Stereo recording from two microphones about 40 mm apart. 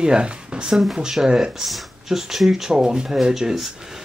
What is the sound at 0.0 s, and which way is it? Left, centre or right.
Speech, right.